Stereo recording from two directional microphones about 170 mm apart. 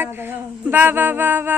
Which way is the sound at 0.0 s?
10° right (ahead or behind).